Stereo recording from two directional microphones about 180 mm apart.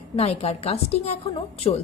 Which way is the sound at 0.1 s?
35° left (ahead or behind).